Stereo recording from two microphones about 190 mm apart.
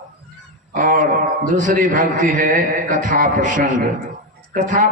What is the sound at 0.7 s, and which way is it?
A man's voice, 45° right (ahead or behind).